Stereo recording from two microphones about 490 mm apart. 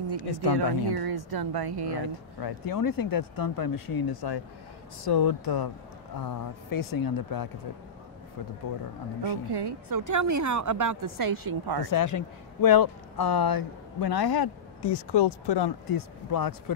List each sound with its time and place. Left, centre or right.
0.2 s speech: left
0.5 s speech: right
2.4 s speech: left
9.5 s a woman's voice: right
11.8 s speech: left